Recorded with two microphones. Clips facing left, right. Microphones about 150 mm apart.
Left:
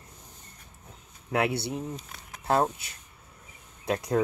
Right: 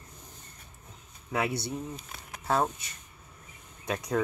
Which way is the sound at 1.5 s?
30° left (ahead or behind).